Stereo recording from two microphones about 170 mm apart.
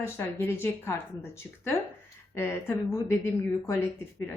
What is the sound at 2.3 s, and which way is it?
Speech, 15° left (ahead or behind).